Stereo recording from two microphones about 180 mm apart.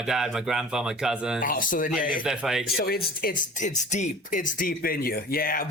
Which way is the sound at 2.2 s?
5° right (ahead or behind).